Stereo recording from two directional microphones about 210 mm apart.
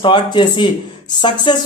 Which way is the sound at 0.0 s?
20° left (ahead or behind).